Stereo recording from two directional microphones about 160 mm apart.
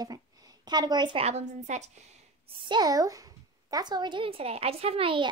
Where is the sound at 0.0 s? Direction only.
25° right (ahead or behind).